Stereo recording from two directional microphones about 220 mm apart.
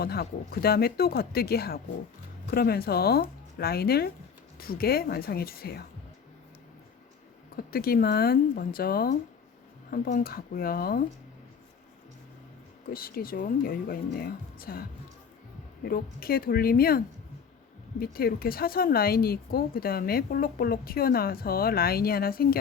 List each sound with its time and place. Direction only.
0.0 s speech: 45° left (ahead or behind)
7.5 s speech: 45° left (ahead or behind)
12.9 s speech: 40° left (ahead or behind)
18.0 s speech: 45° left (ahead or behind)